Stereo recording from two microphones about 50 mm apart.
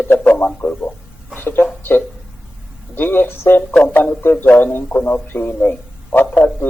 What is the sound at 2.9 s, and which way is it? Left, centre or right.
A man's voice, left.